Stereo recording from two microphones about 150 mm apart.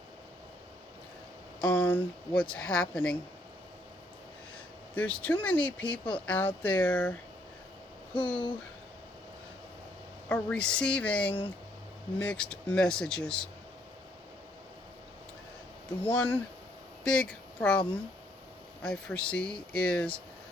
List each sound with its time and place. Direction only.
1.6 s a woman's voice: 10° left (ahead or behind)
4.9 s a woman's voice: 10° left (ahead or behind)
5.8 s speech: 30° left (ahead or behind)
6.2 s a woman's voice: 10° left (ahead or behind)
8.2 s speech: 30° left (ahead or behind)
10.2 s a woman's voice: 10° left (ahead or behind)
16.0 s a woman's voice: 10° left (ahead or behind)